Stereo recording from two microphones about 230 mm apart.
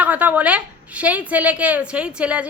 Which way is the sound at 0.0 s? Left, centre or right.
Centre.